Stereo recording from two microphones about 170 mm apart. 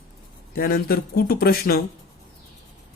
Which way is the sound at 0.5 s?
60° left (ahead or behind).